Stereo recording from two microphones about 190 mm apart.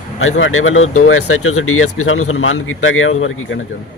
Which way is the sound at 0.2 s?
90° left.